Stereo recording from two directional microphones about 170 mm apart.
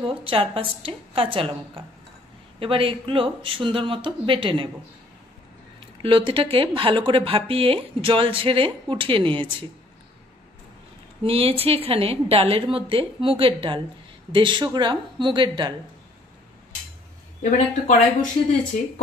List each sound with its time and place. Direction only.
0.2 s speech: 30° right (ahead or behind)
6.0 s speech: 30° right (ahead or behind)
11.2 s a woman's voice: 35° right (ahead or behind)
17.4 s speech: 50° left (ahead or behind)